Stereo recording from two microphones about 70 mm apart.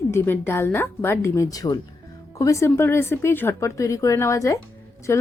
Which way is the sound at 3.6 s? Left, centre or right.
Left.